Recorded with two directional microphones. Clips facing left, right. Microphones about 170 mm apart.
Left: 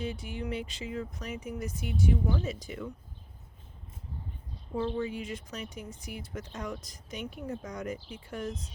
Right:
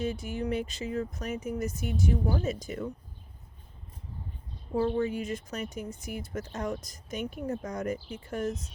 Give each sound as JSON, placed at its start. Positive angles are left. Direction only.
{"t": 0.0, "sound": "speech", "side_deg": -45}
{"t": 4.8, "sound": "speech", "side_deg": -45}